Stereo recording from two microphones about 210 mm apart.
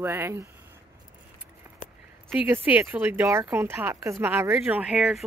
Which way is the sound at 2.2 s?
10° right (ahead or behind).